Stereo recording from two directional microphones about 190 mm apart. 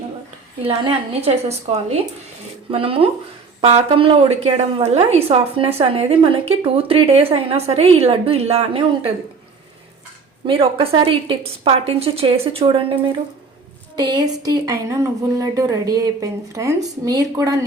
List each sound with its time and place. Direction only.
0.9 s a woman's voice: 30° right (ahead or behind)
10.4 s speech: 30° right (ahead or behind)